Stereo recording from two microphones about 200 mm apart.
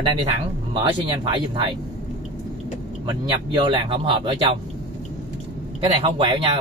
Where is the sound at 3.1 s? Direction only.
25° right (ahead or behind).